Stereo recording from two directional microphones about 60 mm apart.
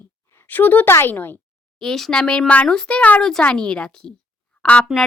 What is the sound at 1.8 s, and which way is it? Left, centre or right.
Speech, centre.